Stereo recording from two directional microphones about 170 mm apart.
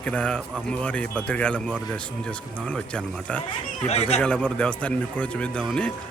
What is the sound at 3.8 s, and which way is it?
Speech, 40° left (ahead or behind).